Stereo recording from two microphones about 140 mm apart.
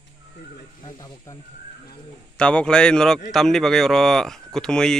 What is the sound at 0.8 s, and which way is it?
Speech, 30° left (ahead or behind).